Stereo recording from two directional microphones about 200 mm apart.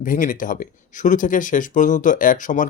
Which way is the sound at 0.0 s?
40° left (ahead or behind).